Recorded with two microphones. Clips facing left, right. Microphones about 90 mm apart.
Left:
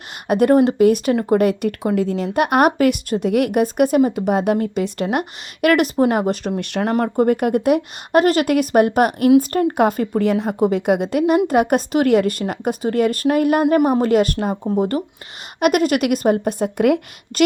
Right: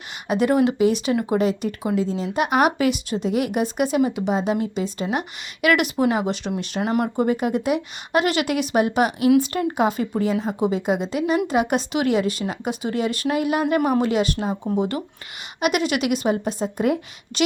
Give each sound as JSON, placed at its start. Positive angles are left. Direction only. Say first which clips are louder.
{"t": 0.3, "sound": "speech", "louder": "left 5 dB", "side_deg": 50}
{"t": 5.6, "sound": "speech", "louder": "left 4 dB", "side_deg": 40}
{"t": 6.6, "sound": "speech", "louder": "left 4 dB", "side_deg": 60}
{"t": 6.9, "sound": "speech", "louder": "left 4 dB", "side_deg": 45}
{"t": 13.7, "sound": "speech", "louder": "left 4 dB", "side_deg": 35}
{"t": 14.1, "sound": "speech", "louder": "left 5 dB", "side_deg": 50}
{"t": 17.3, "sound": "speech", "louder": "left 6 dB", "side_deg": 45}